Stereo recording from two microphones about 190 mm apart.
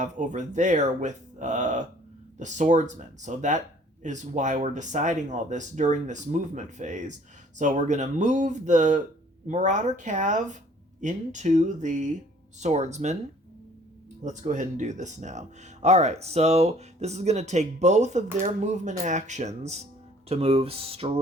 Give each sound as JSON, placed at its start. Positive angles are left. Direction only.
{"t": 0.0, "sound": "speech", "side_deg": -40}
{"t": 14.3, "sound": "speech", "side_deg": -40}